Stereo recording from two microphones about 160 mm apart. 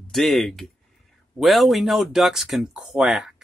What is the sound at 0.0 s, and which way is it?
Speech, centre (ahead or behind).